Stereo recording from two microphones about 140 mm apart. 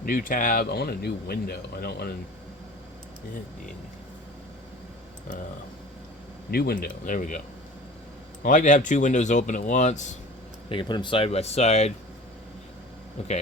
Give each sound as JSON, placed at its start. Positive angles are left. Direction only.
{"t": 0.0, "sound": "speech", "side_deg": 85}
{"t": 6.5, "sound": "speech", "side_deg": 90}
{"t": 8.4, "sound": "speech", "side_deg": 65}
{"t": 10.7, "sound": "speech", "side_deg": 35}
{"t": 13.2, "sound": "speech", "side_deg": 50}